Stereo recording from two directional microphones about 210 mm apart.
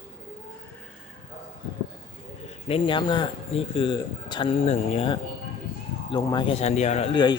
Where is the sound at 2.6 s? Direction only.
25° left (ahead or behind).